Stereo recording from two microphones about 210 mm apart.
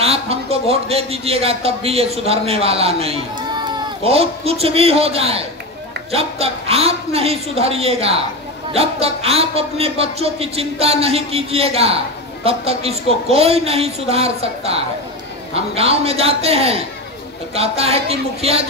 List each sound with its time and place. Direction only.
0.0 s a man's voice: 30° right (ahead or behind)